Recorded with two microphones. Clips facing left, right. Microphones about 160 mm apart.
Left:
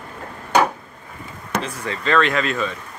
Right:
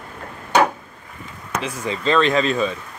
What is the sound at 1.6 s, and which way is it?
Speech, 20° right (ahead or behind).